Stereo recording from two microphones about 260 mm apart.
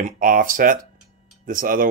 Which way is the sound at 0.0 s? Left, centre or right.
Right.